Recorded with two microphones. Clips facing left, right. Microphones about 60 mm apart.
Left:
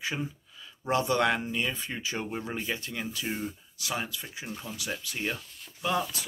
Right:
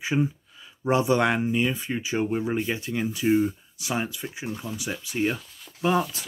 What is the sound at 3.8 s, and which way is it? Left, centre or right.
Speech, right.